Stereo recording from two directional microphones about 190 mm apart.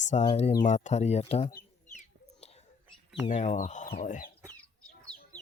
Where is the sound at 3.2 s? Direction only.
40° left (ahead or behind).